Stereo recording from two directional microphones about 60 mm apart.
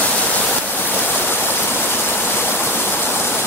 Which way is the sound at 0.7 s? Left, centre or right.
Left.